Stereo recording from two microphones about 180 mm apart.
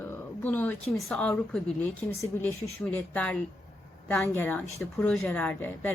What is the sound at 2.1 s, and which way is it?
Speech, 15° left (ahead or behind).